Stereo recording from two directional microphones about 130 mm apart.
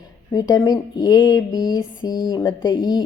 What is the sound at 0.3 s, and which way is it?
A woman's voice, 30° left (ahead or behind).